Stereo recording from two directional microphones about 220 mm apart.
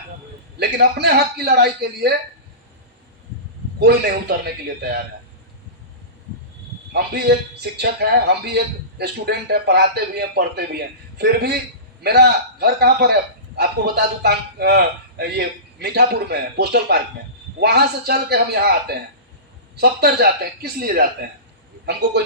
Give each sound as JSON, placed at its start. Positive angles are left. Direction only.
{"t": 0.6, "sound": "a man's voice", "side_deg": -50}
{"t": 3.8, "sound": "a man's voice", "side_deg": -45}
{"t": 6.9, "sound": "a man's voice", "side_deg": -50}